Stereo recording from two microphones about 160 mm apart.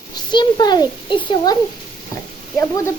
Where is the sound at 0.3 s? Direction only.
25° left (ahead or behind).